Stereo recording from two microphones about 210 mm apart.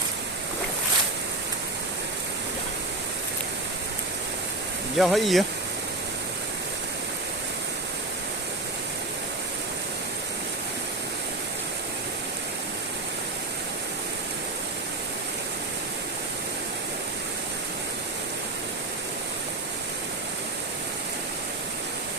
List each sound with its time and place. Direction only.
4.9 s speech: centre (ahead or behind)